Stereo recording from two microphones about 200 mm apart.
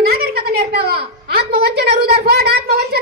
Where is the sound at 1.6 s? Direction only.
50° right (ahead or behind).